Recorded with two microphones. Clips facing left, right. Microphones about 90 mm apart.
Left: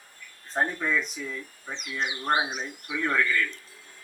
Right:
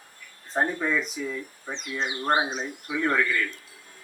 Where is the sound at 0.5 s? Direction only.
10° right (ahead or behind).